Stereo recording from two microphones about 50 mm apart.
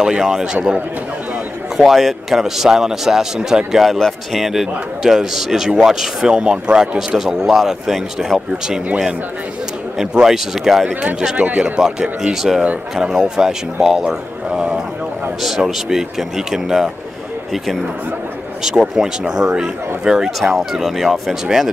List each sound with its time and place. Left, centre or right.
0.0 s a man's voice: centre
1.8 s a man's voice: centre
9.9 s a man's voice: centre
11.3 s speech: right
12.2 s a man's voice: centre
15.4 s a man's voice: centre
18.6 s a man's voice: centre
20.2 s speech: centre